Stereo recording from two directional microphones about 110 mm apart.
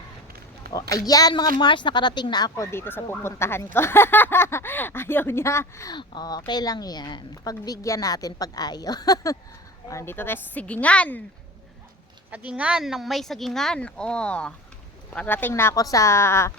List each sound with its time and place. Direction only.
0.7 s a woman's voice: 30° left (ahead or behind)
2.6 s speech: 20° left (ahead or behind)
5.9 s a woman's voice: 40° left (ahead or behind)
9.9 s a woman's voice: 25° left (ahead or behind)
12.3 s speech: 15° right (ahead or behind); by 15.7 s 20° left (ahead or behind)
15.7 s speech: 30° left (ahead or behind)